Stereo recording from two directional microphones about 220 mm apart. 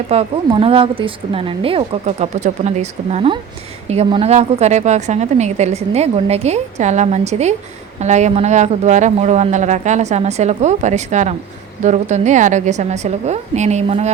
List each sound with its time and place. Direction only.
0.1 s a woman's voice: 25° right (ahead or behind)